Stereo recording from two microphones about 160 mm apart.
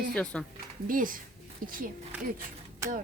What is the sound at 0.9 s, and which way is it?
Speech, 60° right (ahead or behind).